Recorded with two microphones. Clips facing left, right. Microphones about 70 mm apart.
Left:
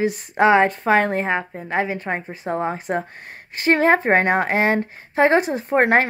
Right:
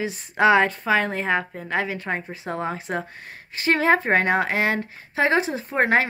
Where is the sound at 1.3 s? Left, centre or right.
Left.